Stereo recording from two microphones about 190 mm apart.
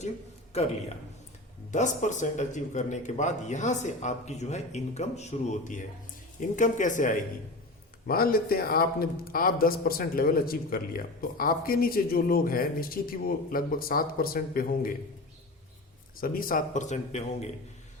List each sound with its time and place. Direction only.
0.5 s a man's voice: 35° left (ahead or behind)
1.7 s a man's voice: 40° left (ahead or behind)
16.1 s a man's voice: 50° left (ahead or behind)